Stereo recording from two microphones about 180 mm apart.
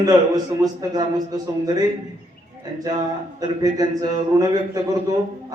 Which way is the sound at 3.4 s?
20° right (ahead or behind).